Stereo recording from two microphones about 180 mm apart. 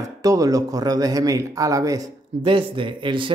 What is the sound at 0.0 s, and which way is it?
Speech, 20° right (ahead or behind).